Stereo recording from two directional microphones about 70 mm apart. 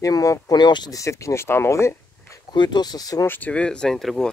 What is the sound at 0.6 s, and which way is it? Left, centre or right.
Speech, left.